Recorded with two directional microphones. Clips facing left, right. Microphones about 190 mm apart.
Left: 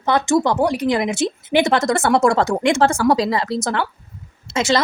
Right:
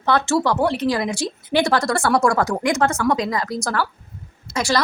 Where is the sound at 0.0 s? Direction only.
15° left (ahead or behind).